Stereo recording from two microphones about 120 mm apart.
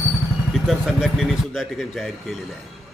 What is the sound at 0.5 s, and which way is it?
A man's voice, centre (ahead or behind).